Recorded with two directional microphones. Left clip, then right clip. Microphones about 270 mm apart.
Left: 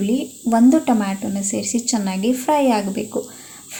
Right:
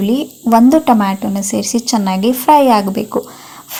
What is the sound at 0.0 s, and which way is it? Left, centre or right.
Speech, right.